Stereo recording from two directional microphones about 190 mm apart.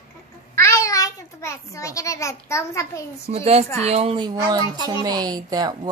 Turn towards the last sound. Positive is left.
turn(degrees=-20)  # may be behind; listen again after turning